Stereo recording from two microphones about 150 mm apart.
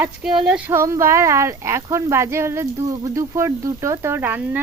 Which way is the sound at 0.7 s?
20° right (ahead or behind).